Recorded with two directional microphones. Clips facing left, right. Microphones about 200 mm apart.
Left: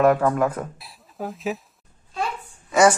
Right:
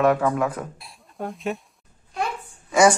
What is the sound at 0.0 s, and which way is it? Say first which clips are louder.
Speech: left 2 dB; centre (ahead or behind).